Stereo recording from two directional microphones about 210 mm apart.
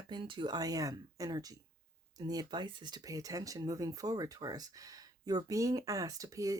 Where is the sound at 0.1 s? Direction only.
25° right (ahead or behind).